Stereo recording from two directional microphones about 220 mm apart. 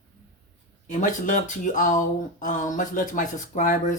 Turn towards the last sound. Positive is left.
turn(degrees=35)  # may be behind; listen again after turning